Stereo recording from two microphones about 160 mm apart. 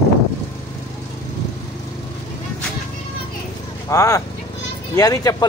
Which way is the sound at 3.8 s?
20° left (ahead or behind).